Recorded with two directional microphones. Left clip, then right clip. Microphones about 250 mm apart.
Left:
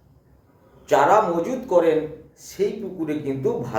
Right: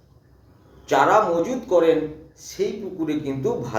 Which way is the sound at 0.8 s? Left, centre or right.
Centre.